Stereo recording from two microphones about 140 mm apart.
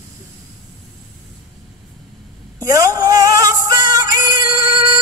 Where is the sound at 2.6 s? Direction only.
25° right (ahead or behind).